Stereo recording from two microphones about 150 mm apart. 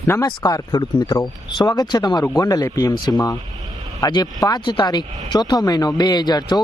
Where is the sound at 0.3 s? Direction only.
25° left (ahead or behind).